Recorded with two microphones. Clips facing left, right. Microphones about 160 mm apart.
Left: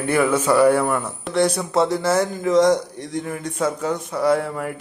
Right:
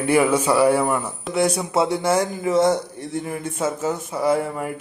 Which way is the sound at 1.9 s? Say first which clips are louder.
Even; 30° right (ahead or behind).